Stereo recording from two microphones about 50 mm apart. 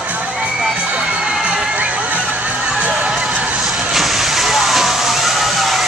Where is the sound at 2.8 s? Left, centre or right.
Right.